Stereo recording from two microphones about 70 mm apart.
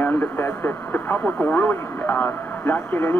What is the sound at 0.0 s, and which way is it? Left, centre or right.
Speech, left.